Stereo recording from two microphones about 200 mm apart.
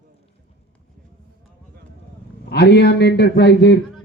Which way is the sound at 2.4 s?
55° left (ahead or behind).